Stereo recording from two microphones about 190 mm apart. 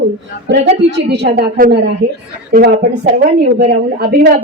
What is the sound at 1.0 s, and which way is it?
Speech, 60° right (ahead or behind).